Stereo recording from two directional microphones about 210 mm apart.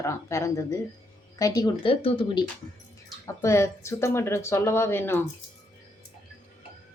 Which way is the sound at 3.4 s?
15° left (ahead or behind).